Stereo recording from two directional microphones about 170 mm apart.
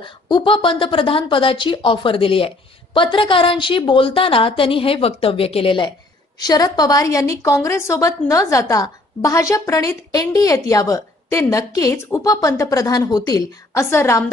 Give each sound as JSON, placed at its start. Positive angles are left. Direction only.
{"t": 0.0, "sound": "a woman's voice", "side_deg": 30}